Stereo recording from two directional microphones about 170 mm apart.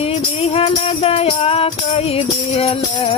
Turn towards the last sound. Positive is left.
turn(degrees=35)  # may be behind; listen again after turning